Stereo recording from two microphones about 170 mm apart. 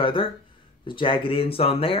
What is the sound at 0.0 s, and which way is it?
Speech, 30° left (ahead or behind).